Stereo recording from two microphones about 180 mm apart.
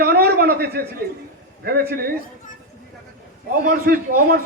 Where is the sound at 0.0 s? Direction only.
60° right (ahead or behind).